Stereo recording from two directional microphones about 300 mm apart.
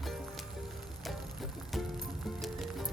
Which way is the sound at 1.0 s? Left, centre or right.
Centre.